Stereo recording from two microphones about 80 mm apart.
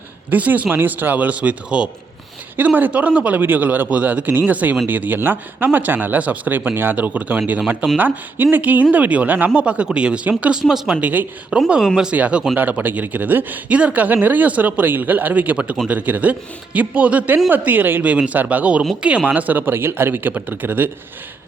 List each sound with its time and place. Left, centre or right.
0.3 s speech: centre